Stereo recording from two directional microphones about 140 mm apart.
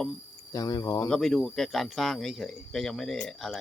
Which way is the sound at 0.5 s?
25° left (ahead or behind).